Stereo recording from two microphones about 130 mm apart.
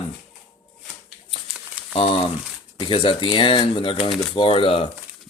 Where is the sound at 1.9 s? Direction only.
45° left (ahead or behind).